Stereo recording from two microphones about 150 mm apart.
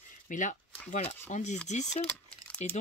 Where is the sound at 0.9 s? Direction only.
45° left (ahead or behind).